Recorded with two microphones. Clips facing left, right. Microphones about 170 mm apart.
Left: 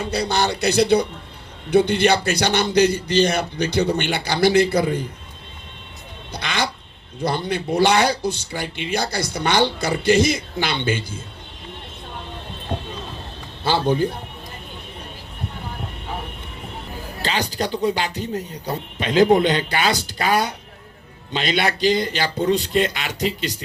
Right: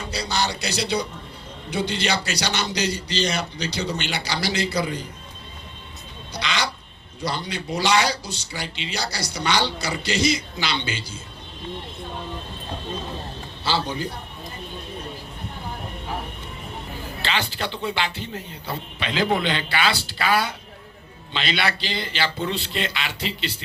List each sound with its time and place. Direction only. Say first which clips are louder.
0.1 s a man's voice: left 4 dB; 55° left (ahead or behind)
6.3 s a sound: left 2 dB; 55° left (ahead or behind)
7.2 s speech: left 6 dB; 55° left (ahead or behind)
13.7 s speech: left 7 dB; 55° left (ahead or behind)
17.2 s speech: left 4 dB; 40° left (ahead or behind)